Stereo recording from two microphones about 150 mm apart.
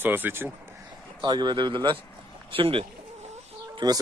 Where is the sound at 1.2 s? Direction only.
30° right (ahead or behind).